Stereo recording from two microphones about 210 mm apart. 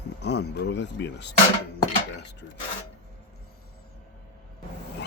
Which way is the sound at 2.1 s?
55° left (ahead or behind).